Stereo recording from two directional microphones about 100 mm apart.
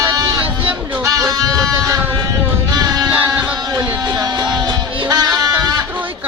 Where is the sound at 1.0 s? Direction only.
35° right (ahead or behind).